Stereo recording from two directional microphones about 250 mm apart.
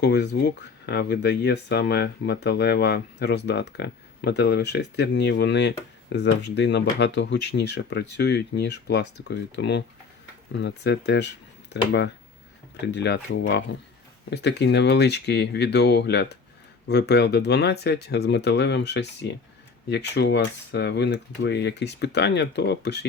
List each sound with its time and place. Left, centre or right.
0.0 s speech: left